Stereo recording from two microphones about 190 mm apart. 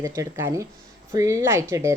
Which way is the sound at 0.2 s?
15° right (ahead or behind).